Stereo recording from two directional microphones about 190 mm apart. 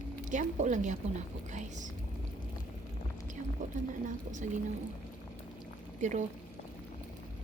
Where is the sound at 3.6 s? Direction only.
40° right (ahead or behind).